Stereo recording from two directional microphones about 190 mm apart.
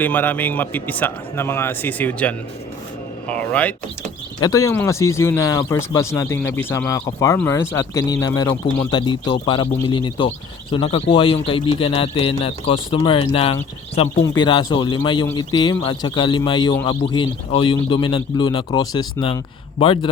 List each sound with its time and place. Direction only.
0.0 s speech: 10° left (ahead or behind)
4.4 s speech: 20° left (ahead or behind)